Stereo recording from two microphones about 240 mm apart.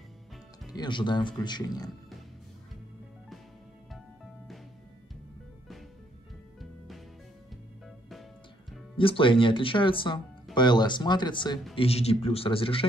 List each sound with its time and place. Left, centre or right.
0.7 s speech: centre
8.9 s speech: left